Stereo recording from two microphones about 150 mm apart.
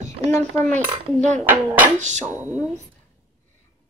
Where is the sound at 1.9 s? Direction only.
50° right (ahead or behind).